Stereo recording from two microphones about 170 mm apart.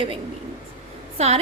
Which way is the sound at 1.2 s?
40° right (ahead or behind).